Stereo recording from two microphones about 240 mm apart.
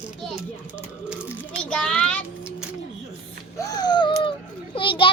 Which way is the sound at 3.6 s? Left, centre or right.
Centre.